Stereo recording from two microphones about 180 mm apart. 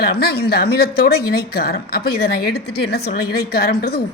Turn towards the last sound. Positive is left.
turn(degrees=60)  # may be behind; listen again after turning